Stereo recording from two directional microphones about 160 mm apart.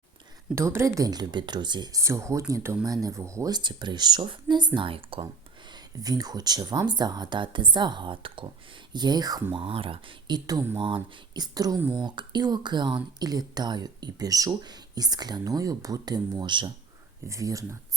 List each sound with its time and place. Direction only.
0.5 s speech: 15° right (ahead or behind); by 5.2 s 35° right (ahead or behind)
5.7 s speech: 25° right (ahead or behind)
10.8 s speech: 30° right (ahead or behind)